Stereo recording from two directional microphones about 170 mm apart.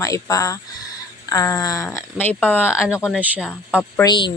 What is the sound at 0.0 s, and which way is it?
Speech, 20° left (ahead or behind).